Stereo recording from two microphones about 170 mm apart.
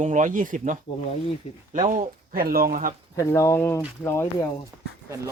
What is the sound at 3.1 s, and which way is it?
Speech, 20° left (ahead or behind).